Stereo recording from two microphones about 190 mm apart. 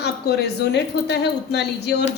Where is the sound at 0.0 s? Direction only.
60° left (ahead or behind).